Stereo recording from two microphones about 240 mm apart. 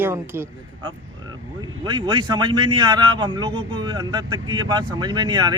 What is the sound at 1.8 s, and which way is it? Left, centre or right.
A man's voice, centre.